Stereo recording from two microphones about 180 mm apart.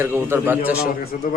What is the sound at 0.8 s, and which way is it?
Speech, 50° left (ahead or behind).